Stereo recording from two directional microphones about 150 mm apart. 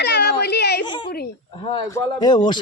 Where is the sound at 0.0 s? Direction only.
90° left.